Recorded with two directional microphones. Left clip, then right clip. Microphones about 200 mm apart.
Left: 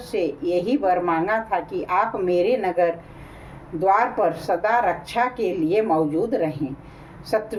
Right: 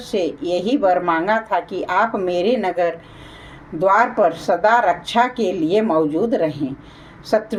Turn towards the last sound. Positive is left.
turn(degrees=-35)  # may be behind; listen again after turning